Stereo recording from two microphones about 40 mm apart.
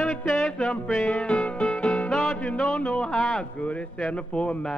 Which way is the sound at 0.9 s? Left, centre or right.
Left.